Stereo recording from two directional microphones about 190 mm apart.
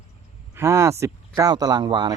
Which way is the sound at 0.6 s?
15° right (ahead or behind).